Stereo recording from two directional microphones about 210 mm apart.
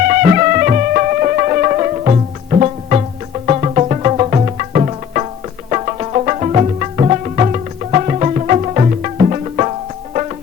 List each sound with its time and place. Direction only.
0.1 s music: 40° right (ahead or behind)